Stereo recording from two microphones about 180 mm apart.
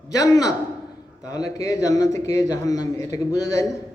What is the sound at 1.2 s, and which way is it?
A man's voice, 20° left (ahead or behind).